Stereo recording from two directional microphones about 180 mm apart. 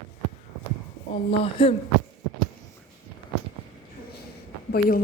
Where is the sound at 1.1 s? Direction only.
30° left (ahead or behind).